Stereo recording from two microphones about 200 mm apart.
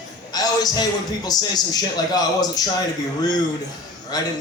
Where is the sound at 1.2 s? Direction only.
20° left (ahead or behind).